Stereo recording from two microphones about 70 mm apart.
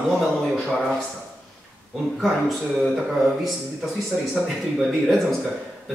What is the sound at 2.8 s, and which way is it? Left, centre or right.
A man's voice, centre.